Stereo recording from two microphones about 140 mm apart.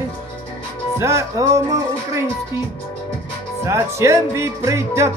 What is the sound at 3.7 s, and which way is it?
Music, 20° right (ahead or behind).